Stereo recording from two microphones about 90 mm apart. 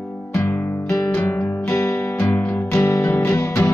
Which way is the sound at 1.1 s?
15° left (ahead or behind).